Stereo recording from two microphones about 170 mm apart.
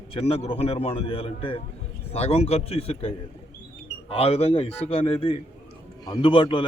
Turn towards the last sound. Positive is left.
turn(degrees=30)  # may be behind; listen again after turning